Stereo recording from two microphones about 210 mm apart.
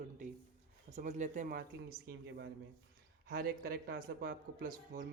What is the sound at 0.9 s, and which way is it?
Speech, 35° right (ahead or behind).